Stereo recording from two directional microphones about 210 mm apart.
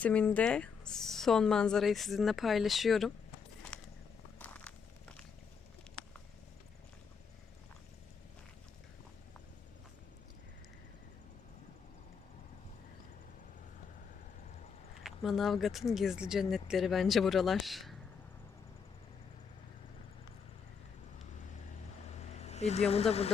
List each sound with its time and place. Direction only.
0.0 s a woman's voice: 5° left (ahead or behind)
3.7 s a sound: 5° left (ahead or behind)
4.4 s walk: 5° left (ahead or behind)
15.0 s a woman's voice: centre (ahead or behind)
22.0 s vehicle: 30° left (ahead or behind)